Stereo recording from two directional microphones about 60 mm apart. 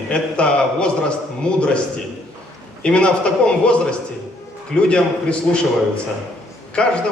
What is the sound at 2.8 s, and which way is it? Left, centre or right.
A man's voice, centre.